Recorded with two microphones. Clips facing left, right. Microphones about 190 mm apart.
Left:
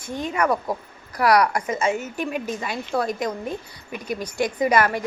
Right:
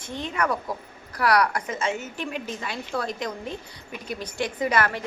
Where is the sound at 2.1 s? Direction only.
45° left (ahead or behind).